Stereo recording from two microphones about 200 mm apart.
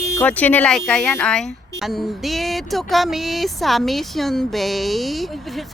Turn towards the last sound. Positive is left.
turn(degrees=0)  # may be behind; listen again after turning